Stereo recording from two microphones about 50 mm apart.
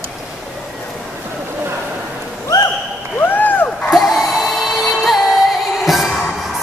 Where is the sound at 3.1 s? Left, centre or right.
Left.